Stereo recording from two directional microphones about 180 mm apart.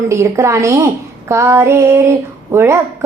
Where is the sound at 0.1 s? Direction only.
15° right (ahead or behind).